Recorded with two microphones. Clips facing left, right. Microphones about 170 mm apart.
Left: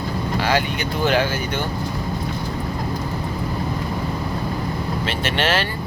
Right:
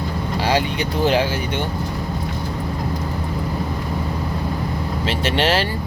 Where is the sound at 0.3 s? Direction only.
30° right (ahead or behind).